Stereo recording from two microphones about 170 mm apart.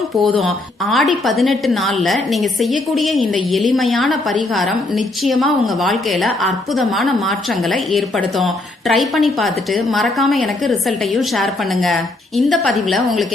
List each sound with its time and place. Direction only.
0.2 s a woman's voice: centre (ahead or behind)